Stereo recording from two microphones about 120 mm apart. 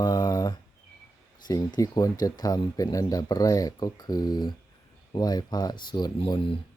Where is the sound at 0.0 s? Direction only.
25° left (ahead or behind).